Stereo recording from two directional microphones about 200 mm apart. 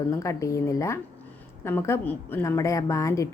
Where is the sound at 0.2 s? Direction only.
15° left (ahead or behind).